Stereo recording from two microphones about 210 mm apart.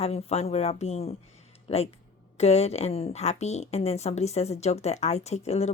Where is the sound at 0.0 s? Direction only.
30° left (ahead or behind).